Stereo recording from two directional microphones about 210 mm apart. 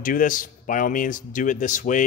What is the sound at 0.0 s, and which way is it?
Speech, 40° left (ahead or behind).